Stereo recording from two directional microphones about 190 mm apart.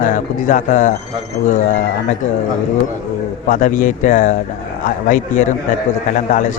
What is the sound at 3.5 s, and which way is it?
Speech, 45° left (ahead or behind).